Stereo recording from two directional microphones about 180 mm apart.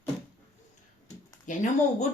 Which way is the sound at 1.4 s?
45° left (ahead or behind).